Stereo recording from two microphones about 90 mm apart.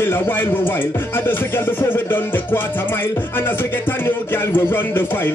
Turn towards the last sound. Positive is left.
turn(degrees=25)  # may be behind; listen again after turning